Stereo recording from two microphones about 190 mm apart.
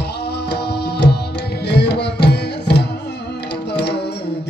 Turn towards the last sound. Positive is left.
turn(degrees=60)  # may be behind; listen again after turning